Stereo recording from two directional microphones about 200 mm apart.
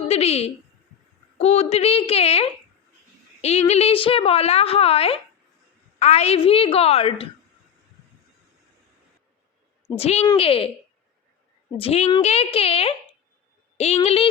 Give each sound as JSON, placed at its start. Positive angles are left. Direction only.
{"t": 0.1, "sound": "a woman's voice", "side_deg": 30}
{"t": 9.9, "sound": "a woman's voice", "side_deg": 30}
{"t": 11.8, "sound": "a woman's voice", "side_deg": 30}